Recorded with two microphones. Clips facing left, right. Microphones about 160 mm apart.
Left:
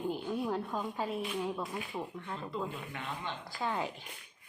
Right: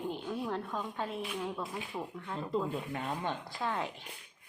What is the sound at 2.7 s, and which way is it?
Speech, 40° right (ahead or behind).